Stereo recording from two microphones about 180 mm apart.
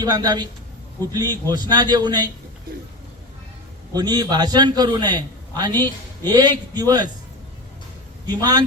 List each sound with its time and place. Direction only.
0.0 s a man's voice: 20° right (ahead or behind)
3.9 s a man's voice: 25° right (ahead or behind)
8.3 s a man's voice: 20° right (ahead or behind)